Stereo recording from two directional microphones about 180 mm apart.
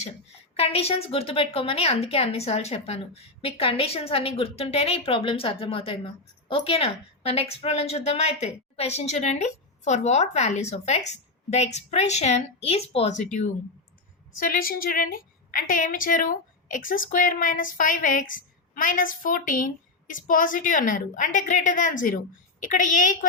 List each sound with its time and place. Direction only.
0.5 s a woman's voice: 35° left (ahead or behind)
14.3 s a woman's voice: 50° left (ahead or behind)